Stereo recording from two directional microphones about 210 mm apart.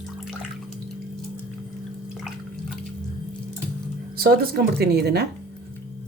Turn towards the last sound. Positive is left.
turn(degrees=-50)  # may be behind; listen again after turning